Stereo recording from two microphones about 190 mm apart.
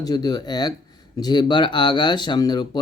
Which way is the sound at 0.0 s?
20° left (ahead or behind).